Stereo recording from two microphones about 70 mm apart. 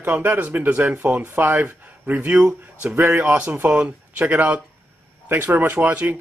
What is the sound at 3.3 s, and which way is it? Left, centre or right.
Speech, centre.